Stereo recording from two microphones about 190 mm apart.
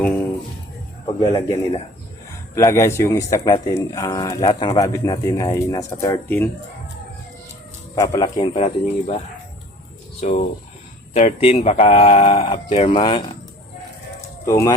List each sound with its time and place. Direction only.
1.0 s speech: 20° left (ahead or behind)
2.6 s a man's voice: 15° left (ahead or behind)
7.9 s speech: 20° left (ahead or behind)
10.2 s speech: 35° left (ahead or behind)
14.4 s speech: 15° left (ahead or behind)